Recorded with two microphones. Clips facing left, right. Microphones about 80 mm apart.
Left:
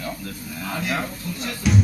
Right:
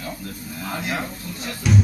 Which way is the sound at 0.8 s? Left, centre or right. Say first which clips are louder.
Left 3 dB; right.